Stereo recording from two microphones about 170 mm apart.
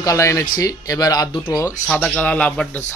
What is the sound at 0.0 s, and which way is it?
Speech, 20° left (ahead or behind).